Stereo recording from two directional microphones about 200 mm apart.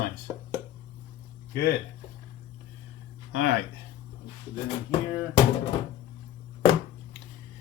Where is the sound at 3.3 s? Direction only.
60° left (ahead or behind).